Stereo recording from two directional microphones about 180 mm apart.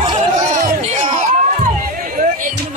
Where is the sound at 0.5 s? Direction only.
40° right (ahead or behind).